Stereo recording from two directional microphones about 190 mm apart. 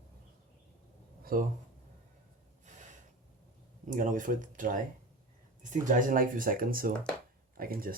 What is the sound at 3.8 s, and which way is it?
Speech, 45° right (ahead or behind).